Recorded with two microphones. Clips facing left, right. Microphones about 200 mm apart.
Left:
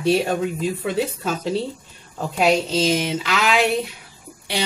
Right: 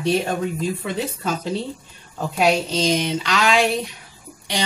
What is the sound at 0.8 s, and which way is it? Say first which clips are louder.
Speech: left 3 dB; 5° left (ahead or behind).